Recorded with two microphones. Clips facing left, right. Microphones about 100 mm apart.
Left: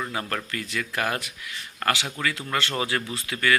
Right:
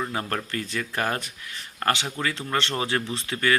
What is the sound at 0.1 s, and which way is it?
Speech, 30° right (ahead or behind).